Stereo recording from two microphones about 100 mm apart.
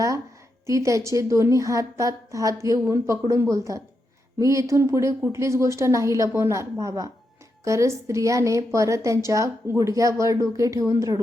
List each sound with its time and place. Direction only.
0.7 s a woman's voice: 30° right (ahead or behind)